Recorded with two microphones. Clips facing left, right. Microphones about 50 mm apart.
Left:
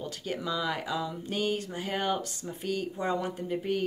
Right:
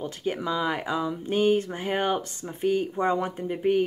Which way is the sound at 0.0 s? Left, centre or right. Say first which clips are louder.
Right 5 dB; right.